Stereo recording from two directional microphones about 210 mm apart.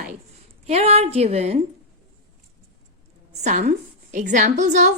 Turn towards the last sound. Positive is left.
turn(degrees=-35)  # may be behind; listen again after turning